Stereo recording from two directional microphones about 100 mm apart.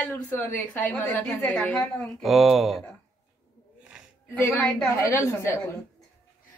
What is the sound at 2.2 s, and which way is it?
Speech, centre (ahead or behind).